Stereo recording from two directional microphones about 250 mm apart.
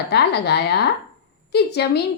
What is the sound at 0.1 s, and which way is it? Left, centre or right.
A woman's voice, left.